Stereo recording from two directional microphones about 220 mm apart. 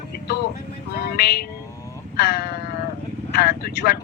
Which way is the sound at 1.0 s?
45° left (ahead or behind).